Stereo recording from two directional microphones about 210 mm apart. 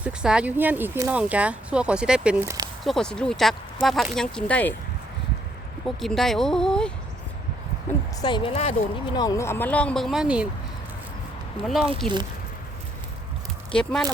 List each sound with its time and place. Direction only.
0.0 s speech: 5° right (ahead or behind)
6.0 s speech: centre (ahead or behind)
8.2 s a woman's voice: 25° left (ahead or behind)
9.1 s speech: 15° left (ahead or behind); by 10.5 s 5° right (ahead or behind)
11.6 s speech: centre (ahead or behind)
13.7 s speech: 5° left (ahead or behind)